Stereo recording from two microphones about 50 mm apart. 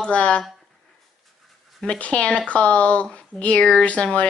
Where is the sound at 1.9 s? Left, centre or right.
Left.